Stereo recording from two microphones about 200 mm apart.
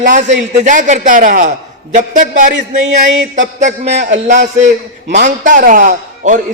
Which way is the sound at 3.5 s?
35° right (ahead or behind).